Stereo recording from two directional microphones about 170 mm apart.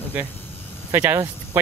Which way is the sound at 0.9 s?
10° right (ahead or behind).